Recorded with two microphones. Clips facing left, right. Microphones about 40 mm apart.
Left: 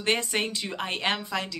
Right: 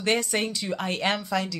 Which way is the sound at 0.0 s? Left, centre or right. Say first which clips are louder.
Right 1 dB; left.